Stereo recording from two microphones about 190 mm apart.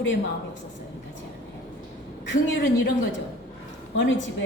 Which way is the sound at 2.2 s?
70° left (ahead or behind).